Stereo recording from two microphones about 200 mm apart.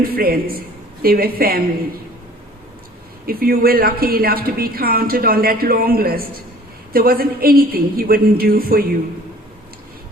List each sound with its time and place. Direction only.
0.0 s a woman's voice: 50° right (ahead or behind)
3.2 s a woman's voice: 50° right (ahead or behind)